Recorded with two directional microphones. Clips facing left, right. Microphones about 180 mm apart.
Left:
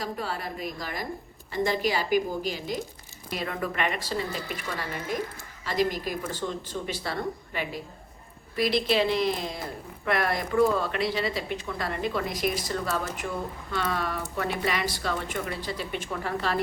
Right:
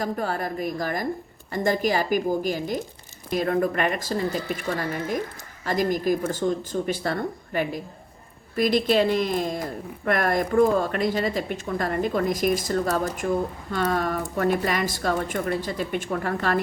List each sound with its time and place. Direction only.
0.0 s speech: 50° right (ahead or behind)